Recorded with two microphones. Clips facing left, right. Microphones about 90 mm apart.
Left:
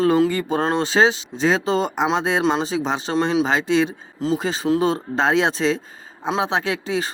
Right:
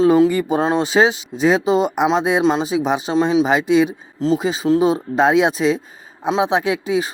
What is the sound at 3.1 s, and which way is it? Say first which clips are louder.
Speech: right 3 dB; 5° right (ahead or behind).